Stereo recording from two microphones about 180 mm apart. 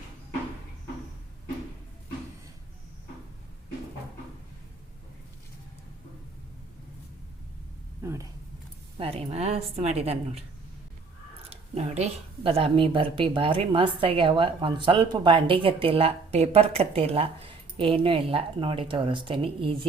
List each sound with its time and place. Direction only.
8.0 s a sound: 15° right (ahead or behind)
9.0 s speech: 35° right (ahead or behind)
11.4 s speech: 35° right (ahead or behind)